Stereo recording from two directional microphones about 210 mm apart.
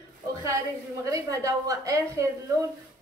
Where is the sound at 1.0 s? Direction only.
15° right (ahead or behind).